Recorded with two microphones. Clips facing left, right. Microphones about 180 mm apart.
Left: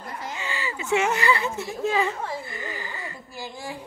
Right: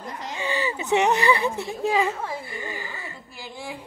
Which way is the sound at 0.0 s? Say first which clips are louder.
Right 3 dB; 20° right (ahead or behind).